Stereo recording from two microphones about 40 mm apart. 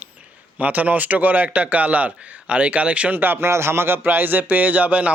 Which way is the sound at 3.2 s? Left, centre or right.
Right.